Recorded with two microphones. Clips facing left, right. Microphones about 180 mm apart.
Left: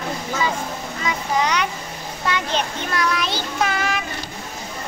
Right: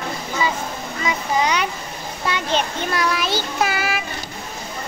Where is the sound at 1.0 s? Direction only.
10° right (ahead or behind).